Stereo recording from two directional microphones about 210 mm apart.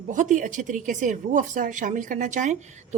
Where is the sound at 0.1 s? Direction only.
35° right (ahead or behind).